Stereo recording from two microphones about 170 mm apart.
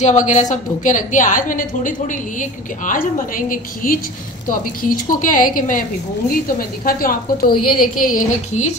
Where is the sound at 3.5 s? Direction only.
55° left (ahead or behind).